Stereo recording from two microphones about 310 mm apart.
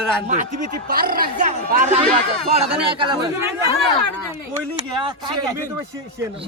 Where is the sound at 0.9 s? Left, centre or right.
Right.